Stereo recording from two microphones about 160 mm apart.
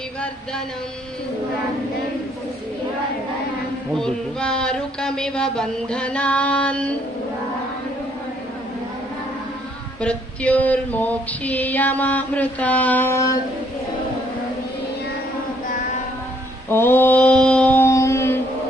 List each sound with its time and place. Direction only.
3.9 s speech: 5° left (ahead or behind)
10.0 s female singing: 5° left (ahead or behind)
16.6 s mantra: 15° left (ahead or behind)